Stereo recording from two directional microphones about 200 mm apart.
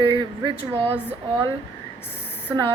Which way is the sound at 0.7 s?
5° right (ahead or behind).